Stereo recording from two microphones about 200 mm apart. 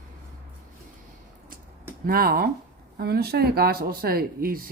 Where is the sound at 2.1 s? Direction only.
50° right (ahead or behind).